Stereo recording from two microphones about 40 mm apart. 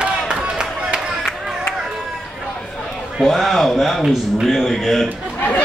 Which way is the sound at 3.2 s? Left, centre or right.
Centre.